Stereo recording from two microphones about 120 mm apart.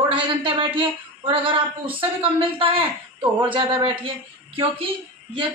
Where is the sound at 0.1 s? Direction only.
45° right (ahead or behind).